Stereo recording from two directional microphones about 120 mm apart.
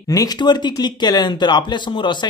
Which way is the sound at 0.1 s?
30° left (ahead or behind).